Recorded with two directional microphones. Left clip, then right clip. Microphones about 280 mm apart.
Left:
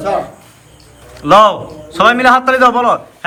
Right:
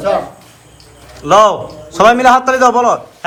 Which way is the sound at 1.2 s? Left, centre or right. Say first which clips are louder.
Left 1 dB; centre.